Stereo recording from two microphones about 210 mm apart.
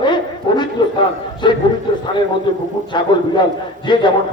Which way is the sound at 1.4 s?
20° left (ahead or behind).